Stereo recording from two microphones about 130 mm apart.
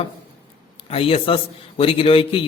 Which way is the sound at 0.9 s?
45° left (ahead or behind).